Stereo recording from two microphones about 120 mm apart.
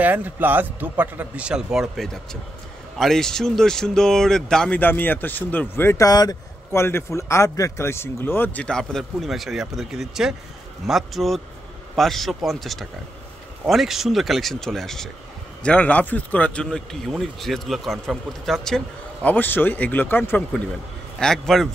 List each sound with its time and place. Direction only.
0.0 s a man's voice: 15° right (ahead or behind); by 8.6 s 20° left (ahead or behind)
8.6 s speech: 5° left (ahead or behind)
19.2 s speech: 15° left (ahead or behind)
21.2 s speech: 5° left (ahead or behind)